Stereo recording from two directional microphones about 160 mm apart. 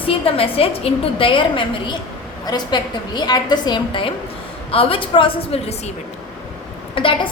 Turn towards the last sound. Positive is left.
turn(degrees=30)  # may be behind; listen again after turning